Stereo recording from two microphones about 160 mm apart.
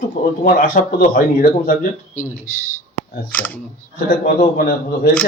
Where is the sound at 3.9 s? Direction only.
65° left (ahead or behind).